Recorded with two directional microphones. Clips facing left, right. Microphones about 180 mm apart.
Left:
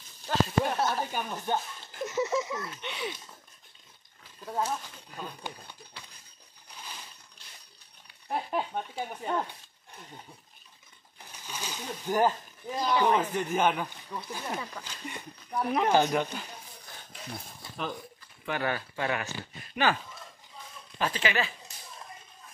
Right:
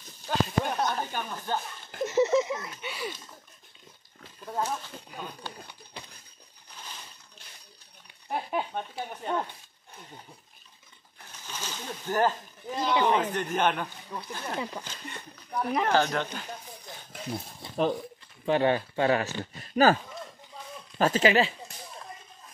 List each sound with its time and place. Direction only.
0.3 s a sound: centre (ahead or behind)
1.5 s speech: 20° left (ahead or behind)
2.0 s a sound: 25° right (ahead or behind)
2.8 s speech: 5° right (ahead or behind)
4.5 s speech: centre (ahead or behind)
8.3 s speech: centre (ahead or behind)
11.4 s speech: 10° left (ahead or behind)
12.6 s speech: centre (ahead or behind)
14.6 s speech: 20° right (ahead or behind)
15.0 s speech: 5° left (ahead or behind)
15.9 s speech: 15° left (ahead or behind)
17.6 s speech: 30° right (ahead or behind)
19.7 s a sound: 40° right (ahead or behind)
21.0 s speech: 40° right (ahead or behind)